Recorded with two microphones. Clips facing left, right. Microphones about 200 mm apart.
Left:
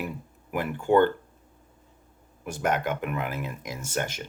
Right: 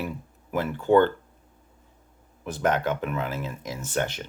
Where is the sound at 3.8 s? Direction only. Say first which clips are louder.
Right 3 dB; 45° left (ahead or behind).